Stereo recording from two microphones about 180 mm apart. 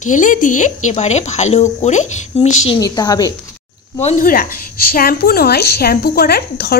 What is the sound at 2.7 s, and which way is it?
Speech, 20° left (ahead or behind).